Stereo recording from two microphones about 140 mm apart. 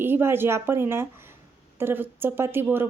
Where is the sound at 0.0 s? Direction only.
15° right (ahead or behind).